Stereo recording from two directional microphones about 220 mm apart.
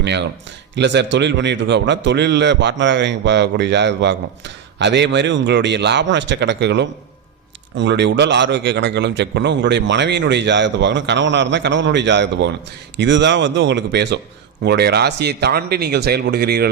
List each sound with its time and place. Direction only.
0.0 s a man's voice: 50° right (ahead or behind)